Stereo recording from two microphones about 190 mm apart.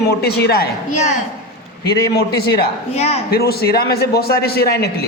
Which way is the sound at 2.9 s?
35° left (ahead or behind).